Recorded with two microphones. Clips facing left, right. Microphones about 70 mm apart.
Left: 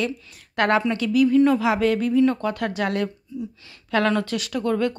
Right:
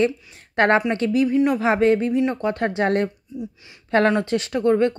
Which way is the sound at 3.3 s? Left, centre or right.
Right.